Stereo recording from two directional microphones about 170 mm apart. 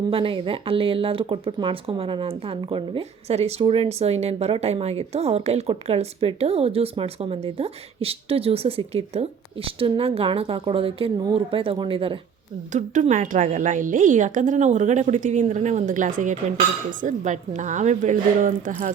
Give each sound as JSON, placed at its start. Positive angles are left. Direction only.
{"t": 0.1, "sound": "speech", "side_deg": -30}
{"t": 12.7, "sound": "a woman's voice", "side_deg": -45}